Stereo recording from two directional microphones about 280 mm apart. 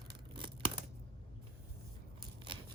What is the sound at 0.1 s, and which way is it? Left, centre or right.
Scissors, centre.